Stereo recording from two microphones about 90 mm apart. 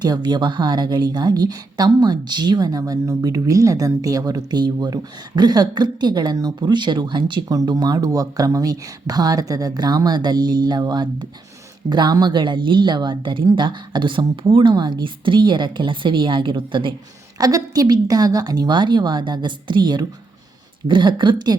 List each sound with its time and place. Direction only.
0.0 s a woman's voice: 55° right (ahead or behind)
7.4 s a woman's voice: 40° right (ahead or behind); by 16.9 s 65° right (ahead or behind)
17.3 s a woman's voice: 45° right (ahead or behind)